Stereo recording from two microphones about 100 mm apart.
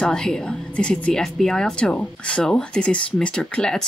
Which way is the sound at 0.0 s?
5° left (ahead or behind).